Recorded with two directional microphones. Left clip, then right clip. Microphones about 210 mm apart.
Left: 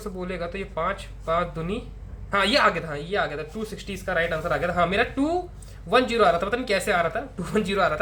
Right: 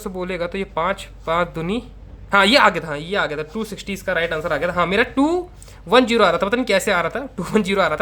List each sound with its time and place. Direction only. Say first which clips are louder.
0.0 s speech: right 6 dB; 45° right (ahead or behind)